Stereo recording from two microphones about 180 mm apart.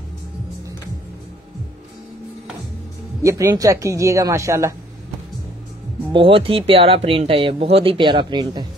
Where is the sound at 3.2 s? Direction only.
15° right (ahead or behind).